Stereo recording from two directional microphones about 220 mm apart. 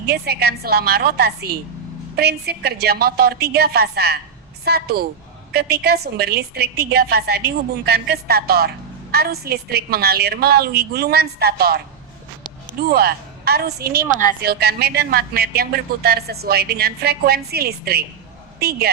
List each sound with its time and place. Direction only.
0.0 s speech: 45° right (ahead or behind)
12.9 s speech: 45° right (ahead or behind)